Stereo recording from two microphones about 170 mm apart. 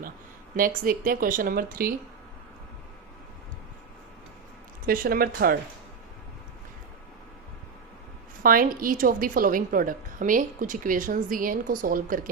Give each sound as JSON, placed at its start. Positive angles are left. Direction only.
{"t": 0.5, "sound": "speech", "side_deg": -55}
{"t": 4.9, "sound": "speech", "side_deg": -60}
{"t": 8.4, "sound": "a woman's voice", "side_deg": -55}